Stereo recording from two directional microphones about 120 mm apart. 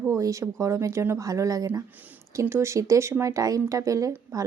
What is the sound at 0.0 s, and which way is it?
Speech, 25° right (ahead or behind).